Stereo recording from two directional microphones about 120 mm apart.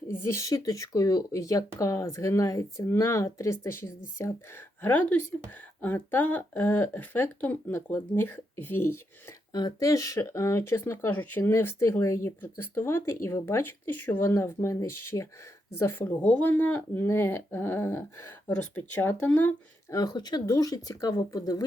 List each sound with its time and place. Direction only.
0.1 s speech: 20° left (ahead or behind)
9.5 s speech: 35° left (ahead or behind)
16.2 s speech: 10° left (ahead or behind)
19.9 s speech: 30° left (ahead or behind)